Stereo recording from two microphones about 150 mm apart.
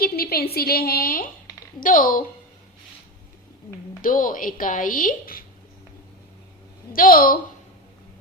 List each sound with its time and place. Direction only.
0.0 s a woman's voice: 90° left; by 2.2 s 70° left (ahead or behind)
4.0 s a woman's voice: 65° left (ahead or behind)
6.9 s a woman's voice: 70° left (ahead or behind)